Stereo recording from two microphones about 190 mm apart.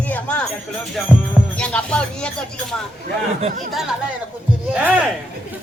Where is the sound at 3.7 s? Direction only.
Centre (ahead or behind).